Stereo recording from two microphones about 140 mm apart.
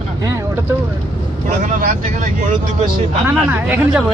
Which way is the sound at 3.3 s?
10° right (ahead or behind).